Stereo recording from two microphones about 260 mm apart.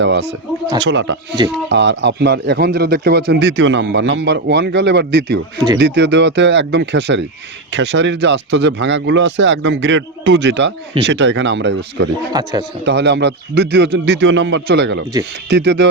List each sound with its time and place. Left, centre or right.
0.0 s speech: right
12.3 s a man's voice: centre
12.8 s speech: right